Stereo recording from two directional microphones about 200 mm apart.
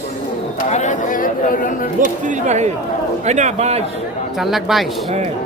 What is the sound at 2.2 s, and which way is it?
A man's voice, 35° right (ahead or behind).